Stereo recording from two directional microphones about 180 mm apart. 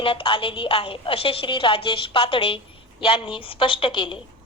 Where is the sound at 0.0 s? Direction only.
30° left (ahead or behind).